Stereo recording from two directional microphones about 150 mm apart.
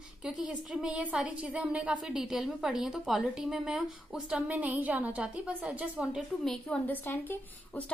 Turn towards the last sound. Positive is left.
turn(degrees=10)  # may be behind; listen again after turning